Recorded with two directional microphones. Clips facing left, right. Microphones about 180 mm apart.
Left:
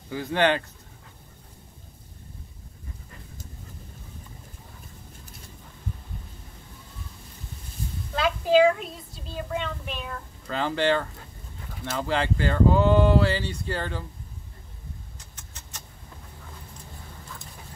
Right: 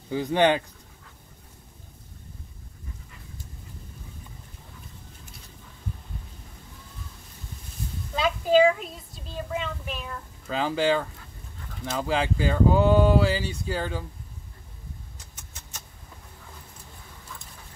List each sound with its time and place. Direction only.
0.1 s speech: 15° right (ahead or behind)
8.1 s a sound: centre (ahead or behind)
12.0 s speech: 10° right (ahead or behind)